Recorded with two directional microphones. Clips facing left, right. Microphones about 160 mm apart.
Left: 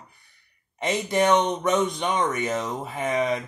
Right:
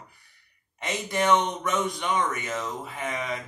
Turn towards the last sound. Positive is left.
turn(degrees=25)  # may be behind; listen again after turning